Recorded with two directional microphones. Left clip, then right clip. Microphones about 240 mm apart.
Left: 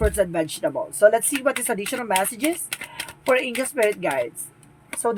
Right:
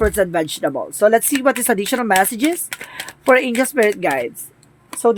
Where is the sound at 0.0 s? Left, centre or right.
Right.